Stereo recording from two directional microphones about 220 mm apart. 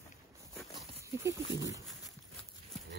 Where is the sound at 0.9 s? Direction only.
15° right (ahead or behind).